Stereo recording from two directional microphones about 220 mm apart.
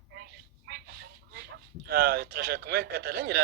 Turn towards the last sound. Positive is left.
turn(degrees=-45)  # may be behind; listen again after turning